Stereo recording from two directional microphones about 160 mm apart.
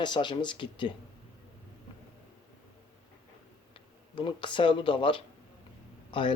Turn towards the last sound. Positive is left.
turn(degrees=30)  # may be behind; listen again after turning